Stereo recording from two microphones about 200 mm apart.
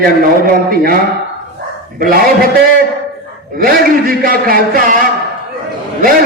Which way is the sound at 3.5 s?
45° right (ahead or behind).